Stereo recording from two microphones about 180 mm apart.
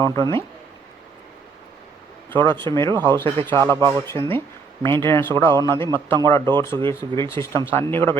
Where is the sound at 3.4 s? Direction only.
15° left (ahead or behind).